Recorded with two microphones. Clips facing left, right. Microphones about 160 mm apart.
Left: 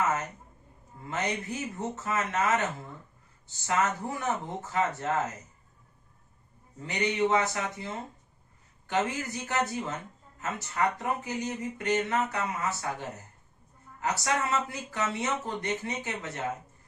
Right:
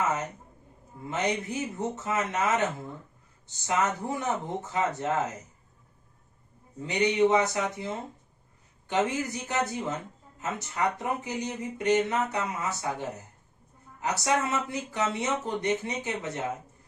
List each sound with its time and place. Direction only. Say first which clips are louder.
1.0 s speech: right 3 dB; 15° right (ahead or behind)
3.7 s speech: right 1 dB; 20° right (ahead or behind)
6.7 s speech: right 4 dB; 15° right (ahead or behind)
8.9 s speech: right 2 dB; 20° right (ahead or behind)